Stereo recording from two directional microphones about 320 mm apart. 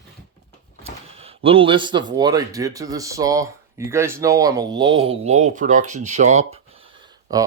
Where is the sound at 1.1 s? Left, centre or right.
Centre.